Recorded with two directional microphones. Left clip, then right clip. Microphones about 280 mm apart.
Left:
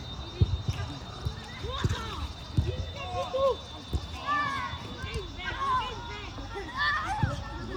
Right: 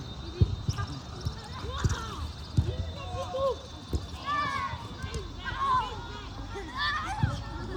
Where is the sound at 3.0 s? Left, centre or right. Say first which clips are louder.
Left 3 dB; left.